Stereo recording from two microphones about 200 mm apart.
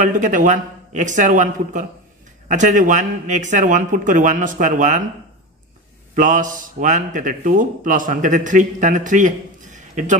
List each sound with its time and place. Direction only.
0.0 s a man's voice: 40° right (ahead or behind)
6.1 s a man's voice: 40° right (ahead or behind)
9.8 s a sound: 40° right (ahead or behind)